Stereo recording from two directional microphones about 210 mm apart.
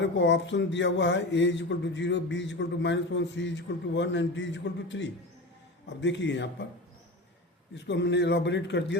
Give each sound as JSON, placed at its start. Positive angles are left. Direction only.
{"t": 0.0, "sound": "speech", "side_deg": 60}
{"t": 7.9, "sound": "speech", "side_deg": 55}